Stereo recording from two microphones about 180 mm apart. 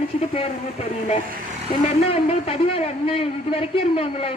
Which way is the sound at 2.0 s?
35° left (ahead or behind).